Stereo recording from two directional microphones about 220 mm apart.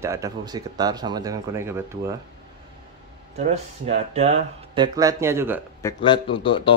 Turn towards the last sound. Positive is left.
turn(degrees=25)  # may be behind; listen again after turning